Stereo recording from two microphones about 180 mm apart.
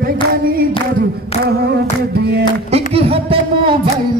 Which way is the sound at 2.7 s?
35° right (ahead or behind).